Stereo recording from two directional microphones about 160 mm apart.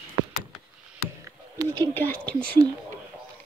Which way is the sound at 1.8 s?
10° left (ahead or behind).